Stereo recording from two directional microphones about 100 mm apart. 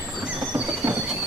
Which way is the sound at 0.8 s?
15° right (ahead or behind).